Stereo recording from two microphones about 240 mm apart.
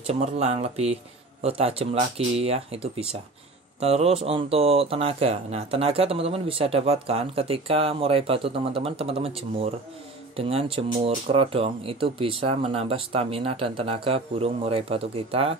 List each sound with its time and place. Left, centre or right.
0.0 s speech: right